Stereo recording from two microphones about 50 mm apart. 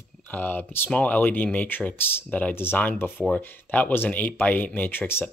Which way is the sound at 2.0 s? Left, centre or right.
Left.